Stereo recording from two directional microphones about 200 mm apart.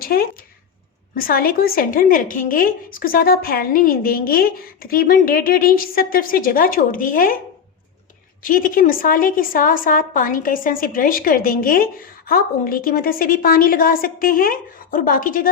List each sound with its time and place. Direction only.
0.0 s a woman's voice: 45° left (ahead or behind)
8.4 s a woman's voice: 45° left (ahead or behind)